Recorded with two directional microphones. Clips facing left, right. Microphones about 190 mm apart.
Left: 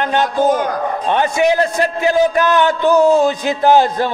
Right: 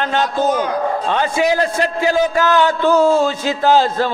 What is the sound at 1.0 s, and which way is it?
A man's voice, 20° left (ahead or behind).